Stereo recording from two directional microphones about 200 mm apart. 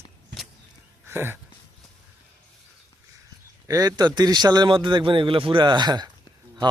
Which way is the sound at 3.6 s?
20° right (ahead or behind).